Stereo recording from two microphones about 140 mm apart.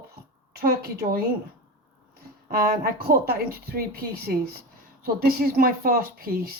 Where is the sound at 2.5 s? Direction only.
90° right.